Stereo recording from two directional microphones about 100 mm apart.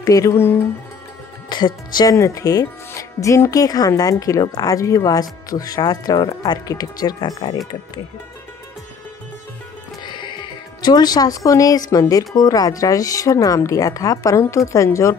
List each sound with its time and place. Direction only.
0.0 s speech: 35° left (ahead or behind)
1.5 s speech: 45° left (ahead or behind)
2.1 s speech: 30° left (ahead or behind)
10.0 s speech: 50° left (ahead or behind); by 15.1 s 30° left (ahead or behind)